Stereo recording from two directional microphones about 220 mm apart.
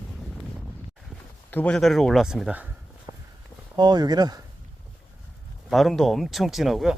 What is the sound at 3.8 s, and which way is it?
Speech, 20° right (ahead or behind).